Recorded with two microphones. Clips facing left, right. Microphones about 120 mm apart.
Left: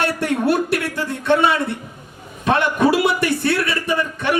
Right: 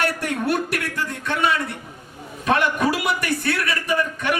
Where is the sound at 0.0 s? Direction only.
30° left (ahead or behind).